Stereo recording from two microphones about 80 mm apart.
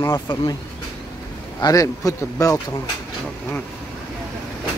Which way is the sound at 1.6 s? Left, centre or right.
Left.